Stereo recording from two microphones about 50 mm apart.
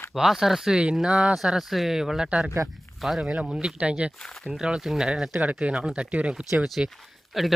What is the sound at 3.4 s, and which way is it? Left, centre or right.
Speech, centre.